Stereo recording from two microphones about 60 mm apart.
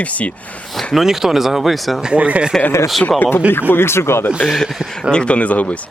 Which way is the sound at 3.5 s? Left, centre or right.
Left.